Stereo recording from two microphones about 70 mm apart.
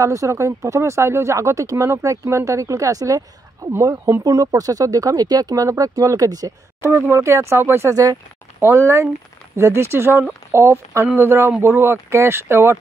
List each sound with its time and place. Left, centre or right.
0.0 s speech: right
6.8 s speech: right
7.9 s speech: right
8.5 s speech: right